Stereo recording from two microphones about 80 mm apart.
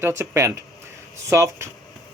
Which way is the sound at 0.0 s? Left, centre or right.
Right.